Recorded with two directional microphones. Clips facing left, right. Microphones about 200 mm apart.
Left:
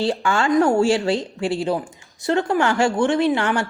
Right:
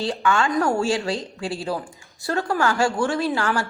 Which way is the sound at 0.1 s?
30° left (ahead or behind).